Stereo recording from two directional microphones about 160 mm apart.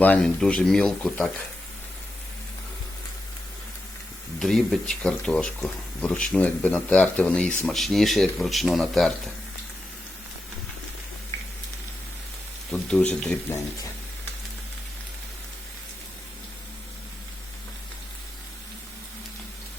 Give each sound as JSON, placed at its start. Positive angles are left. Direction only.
{"t": 0.0, "sound": "speech", "side_deg": 5}
{"t": 4.4, "sound": "speech", "side_deg": 0}
{"t": 11.3, "sound": "a sound", "side_deg": 15}
{"t": 12.9, "sound": "speech", "side_deg": 5}